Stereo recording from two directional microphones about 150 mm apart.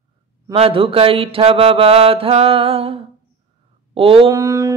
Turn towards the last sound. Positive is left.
turn(degrees=-20)  # may be behind; listen again after turning